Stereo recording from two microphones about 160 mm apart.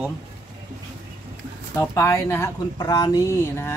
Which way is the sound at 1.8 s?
15° left (ahead or behind).